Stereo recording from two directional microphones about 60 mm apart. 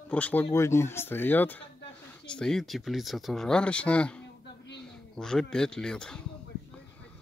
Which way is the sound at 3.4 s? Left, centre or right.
Centre.